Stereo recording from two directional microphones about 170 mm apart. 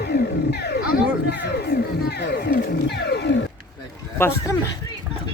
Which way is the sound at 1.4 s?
75° left (ahead or behind).